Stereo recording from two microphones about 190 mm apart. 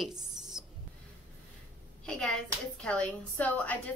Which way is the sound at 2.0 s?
5° left (ahead or behind).